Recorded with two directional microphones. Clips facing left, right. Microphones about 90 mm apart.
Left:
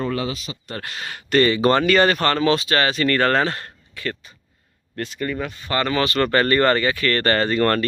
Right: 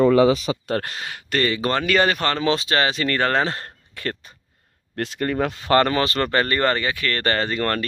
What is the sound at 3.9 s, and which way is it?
Speech, 50° right (ahead or behind).